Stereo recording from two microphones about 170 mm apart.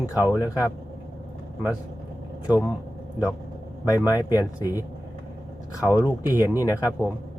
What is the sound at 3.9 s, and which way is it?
Speech, 20° left (ahead or behind).